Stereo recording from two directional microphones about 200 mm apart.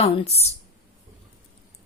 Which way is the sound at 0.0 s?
30° left (ahead or behind).